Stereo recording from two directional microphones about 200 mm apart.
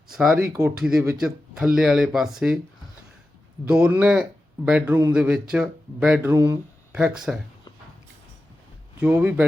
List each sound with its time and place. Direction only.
0.1 s speech: 10° right (ahead or behind)
3.7 s speech: 5° right (ahead or behind)
6.3 s speech: 15° right (ahead or behind)
7.3 s speech: 5° right (ahead or behind)
9.0 s speech: 10° right (ahead or behind)